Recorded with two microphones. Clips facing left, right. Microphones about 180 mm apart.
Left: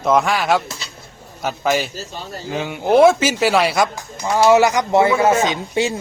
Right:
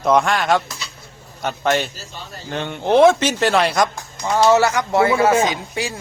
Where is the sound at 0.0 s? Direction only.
Centre (ahead or behind).